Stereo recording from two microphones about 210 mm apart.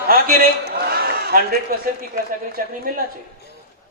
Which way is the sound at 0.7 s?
45° right (ahead or behind).